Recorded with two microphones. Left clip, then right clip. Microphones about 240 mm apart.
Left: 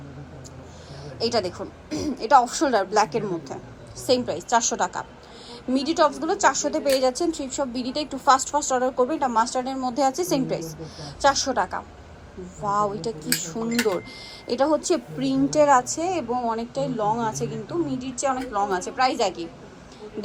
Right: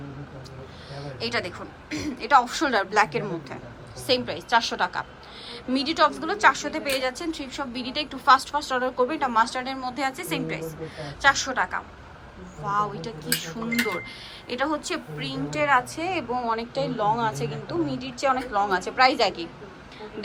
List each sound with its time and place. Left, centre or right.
1.0 s speech: centre
1.9 s a woman's voice: centre
2.1 s a woman's voice: centre
14.4 s a woman's voice: left